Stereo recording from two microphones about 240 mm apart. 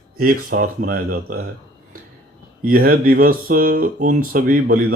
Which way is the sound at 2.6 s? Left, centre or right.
Right.